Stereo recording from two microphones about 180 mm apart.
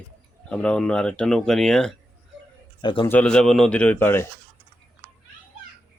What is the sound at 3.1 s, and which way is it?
Speech, 5° left (ahead or behind).